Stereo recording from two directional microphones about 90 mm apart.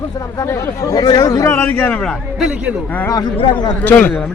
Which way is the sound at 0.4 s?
35° left (ahead or behind).